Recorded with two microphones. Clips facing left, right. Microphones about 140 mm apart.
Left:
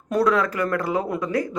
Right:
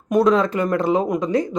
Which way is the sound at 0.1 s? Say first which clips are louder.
Right 4 dB; 20° right (ahead or behind).